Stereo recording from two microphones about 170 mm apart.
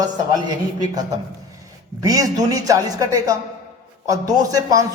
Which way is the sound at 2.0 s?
20° right (ahead or behind).